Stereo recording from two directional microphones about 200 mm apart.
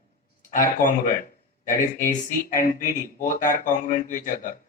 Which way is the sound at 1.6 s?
40° left (ahead or behind).